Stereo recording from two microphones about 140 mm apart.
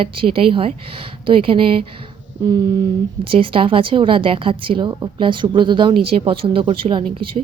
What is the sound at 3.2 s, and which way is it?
Speech, 40° right (ahead or behind).